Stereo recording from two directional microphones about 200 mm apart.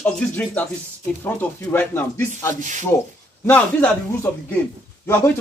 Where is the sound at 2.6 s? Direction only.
40° right (ahead or behind).